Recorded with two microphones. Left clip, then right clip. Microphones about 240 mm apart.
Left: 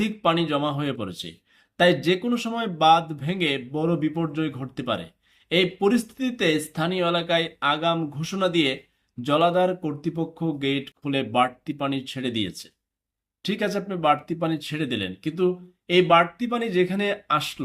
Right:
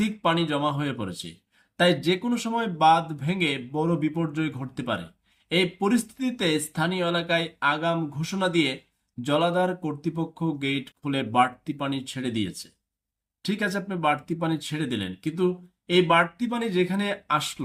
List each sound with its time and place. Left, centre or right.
0.0 s a man's voice: centre
13.5 s a man's voice: centre